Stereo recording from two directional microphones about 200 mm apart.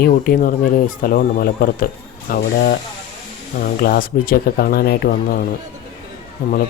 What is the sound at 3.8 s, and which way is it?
Speech, 50° left (ahead or behind).